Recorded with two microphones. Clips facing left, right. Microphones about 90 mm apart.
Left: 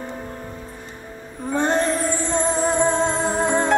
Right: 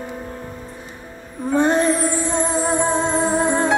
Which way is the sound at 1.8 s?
55° right (ahead or behind).